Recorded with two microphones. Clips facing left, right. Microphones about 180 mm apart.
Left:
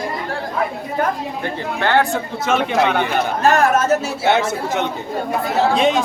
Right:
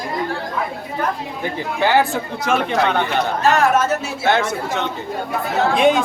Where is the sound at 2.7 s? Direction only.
15° left (ahead or behind).